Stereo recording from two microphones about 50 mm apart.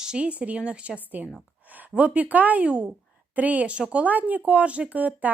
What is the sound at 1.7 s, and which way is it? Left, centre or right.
A woman's voice, right.